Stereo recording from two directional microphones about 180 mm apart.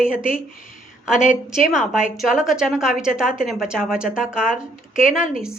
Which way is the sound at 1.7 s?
5° right (ahead or behind).